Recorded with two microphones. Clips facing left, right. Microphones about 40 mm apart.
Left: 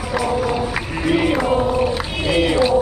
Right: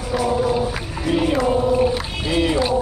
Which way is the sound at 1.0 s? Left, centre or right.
Left.